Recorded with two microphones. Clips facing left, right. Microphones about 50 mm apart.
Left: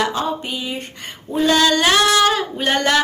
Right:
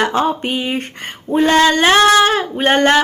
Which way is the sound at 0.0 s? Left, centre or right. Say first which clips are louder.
Right 5 dB; right.